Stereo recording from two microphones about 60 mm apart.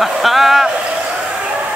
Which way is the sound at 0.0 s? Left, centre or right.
Centre.